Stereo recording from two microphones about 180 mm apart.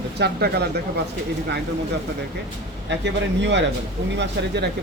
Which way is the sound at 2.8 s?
75° right (ahead or behind).